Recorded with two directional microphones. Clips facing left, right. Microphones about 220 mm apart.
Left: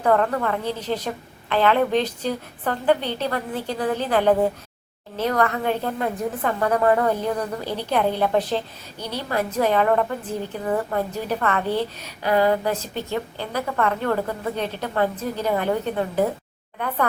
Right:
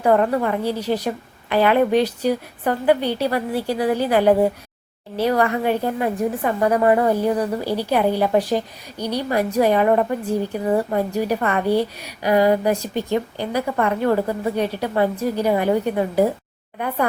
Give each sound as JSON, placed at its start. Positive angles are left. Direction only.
{"t": 0.0, "sound": "a woman's voice", "side_deg": -15}